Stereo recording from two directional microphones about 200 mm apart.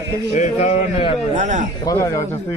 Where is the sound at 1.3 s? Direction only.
40° right (ahead or behind).